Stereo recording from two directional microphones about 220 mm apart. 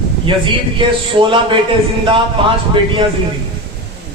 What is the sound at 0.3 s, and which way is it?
A man's voice, 25° right (ahead or behind).